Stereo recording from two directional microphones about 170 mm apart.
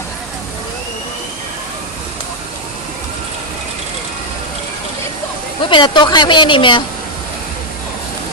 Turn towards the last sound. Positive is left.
turn(degrees=30)  # may be behind; listen again after turning